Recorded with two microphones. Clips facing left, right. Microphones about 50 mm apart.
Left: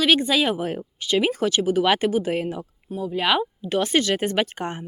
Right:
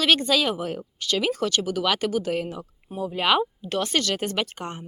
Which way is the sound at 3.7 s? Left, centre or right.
Centre.